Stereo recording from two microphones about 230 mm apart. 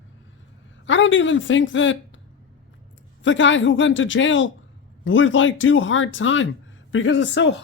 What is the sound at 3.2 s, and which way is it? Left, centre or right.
A woman's voice, left.